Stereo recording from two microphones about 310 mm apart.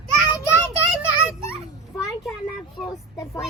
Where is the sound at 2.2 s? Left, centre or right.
Centre.